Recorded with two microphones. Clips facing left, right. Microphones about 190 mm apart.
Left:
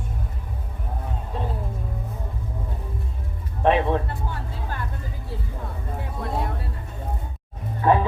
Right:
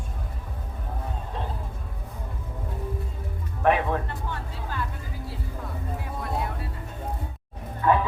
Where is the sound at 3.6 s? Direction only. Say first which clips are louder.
Left 3 dB; 25° left (ahead or behind).